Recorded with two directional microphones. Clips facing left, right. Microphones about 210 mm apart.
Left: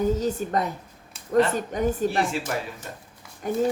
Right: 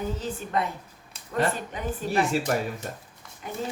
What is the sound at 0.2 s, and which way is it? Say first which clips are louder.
A woman's voice: left 4 dB; 40° left (ahead or behind).